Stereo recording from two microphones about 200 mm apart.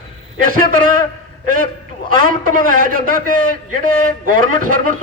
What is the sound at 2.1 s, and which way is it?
A man's voice, 45° right (ahead or behind).